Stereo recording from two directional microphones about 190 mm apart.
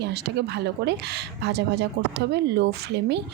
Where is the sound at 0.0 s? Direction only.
60° right (ahead or behind).